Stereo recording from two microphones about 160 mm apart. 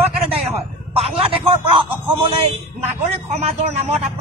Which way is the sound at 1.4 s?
35° right (ahead or behind).